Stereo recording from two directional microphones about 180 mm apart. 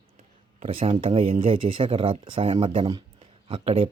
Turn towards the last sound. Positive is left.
turn(degrees=-30)  # may be behind; listen again after turning